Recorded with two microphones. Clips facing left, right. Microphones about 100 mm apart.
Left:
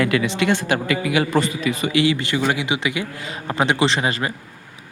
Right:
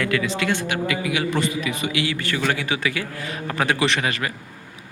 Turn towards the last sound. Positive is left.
turn(degrees=25)  # may be behind; listen again after turning